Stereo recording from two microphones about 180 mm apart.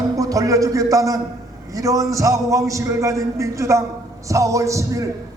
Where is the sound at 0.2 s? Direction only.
20° right (ahead or behind).